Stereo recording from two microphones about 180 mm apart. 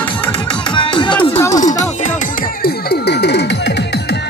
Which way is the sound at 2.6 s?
65° left (ahead or behind).